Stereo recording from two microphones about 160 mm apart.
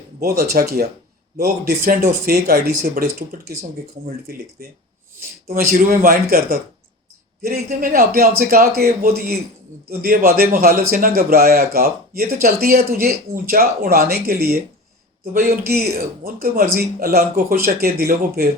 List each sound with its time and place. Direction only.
0.2 s a man's voice: 70° right (ahead or behind)
4.6 s a man's voice: 70° right (ahead or behind)